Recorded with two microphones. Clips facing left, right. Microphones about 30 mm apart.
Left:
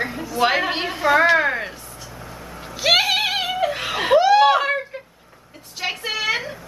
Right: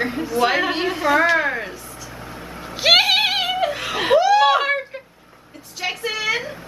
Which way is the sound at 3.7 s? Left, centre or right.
Centre.